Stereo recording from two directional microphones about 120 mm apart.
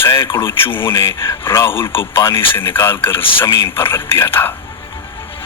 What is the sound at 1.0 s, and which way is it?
Speech, 25° left (ahead or behind).